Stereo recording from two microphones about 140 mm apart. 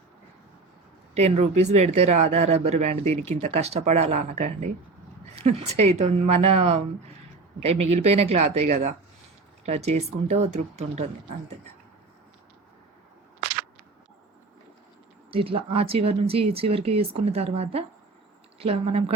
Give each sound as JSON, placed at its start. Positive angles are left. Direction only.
{"t": 1.1, "sound": "speech", "side_deg": -50}
{"t": 8.6, "sound": "speech", "side_deg": -65}
{"t": 9.6, "sound": "speech", "side_deg": -50}
{"t": 15.3, "sound": "speech", "side_deg": -40}